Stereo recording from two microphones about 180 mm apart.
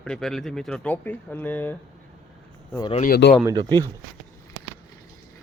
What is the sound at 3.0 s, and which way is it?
Speech, 55° left (ahead or behind).